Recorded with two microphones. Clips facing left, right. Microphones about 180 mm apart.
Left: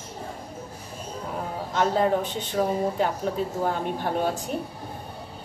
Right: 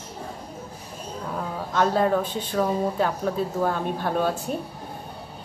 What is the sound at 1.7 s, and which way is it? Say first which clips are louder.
A woman's voice: right 1 dB; 20° left (ahead or behind).